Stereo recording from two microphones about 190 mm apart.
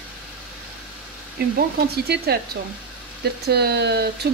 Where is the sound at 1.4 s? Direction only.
55° right (ahead or behind).